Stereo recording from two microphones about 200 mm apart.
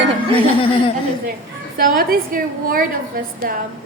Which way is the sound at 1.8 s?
45° right (ahead or behind).